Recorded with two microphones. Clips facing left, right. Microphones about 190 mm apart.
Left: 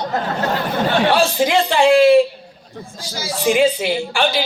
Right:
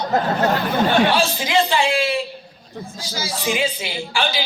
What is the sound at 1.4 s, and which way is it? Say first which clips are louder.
Speech: left 4 dB; 55° left (ahead or behind).